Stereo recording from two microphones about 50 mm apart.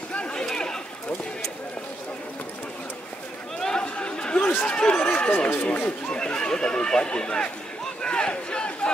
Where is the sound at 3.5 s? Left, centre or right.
Centre.